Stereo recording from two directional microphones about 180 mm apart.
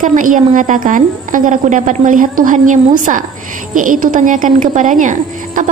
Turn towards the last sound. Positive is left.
turn(degrees=-45)  # may be behind; listen again after turning